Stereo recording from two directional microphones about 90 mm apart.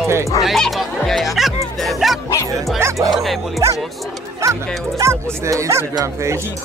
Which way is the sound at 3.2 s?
Centre (ahead or behind).